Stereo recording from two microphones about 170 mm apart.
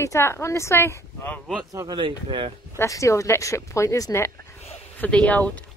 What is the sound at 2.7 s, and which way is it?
Speech, 20° left (ahead or behind).